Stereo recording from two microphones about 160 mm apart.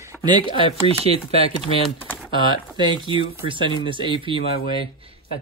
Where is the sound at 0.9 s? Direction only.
40° right (ahead or behind).